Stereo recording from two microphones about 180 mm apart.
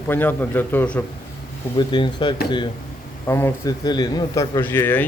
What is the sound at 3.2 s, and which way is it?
Speech, 15° left (ahead or behind).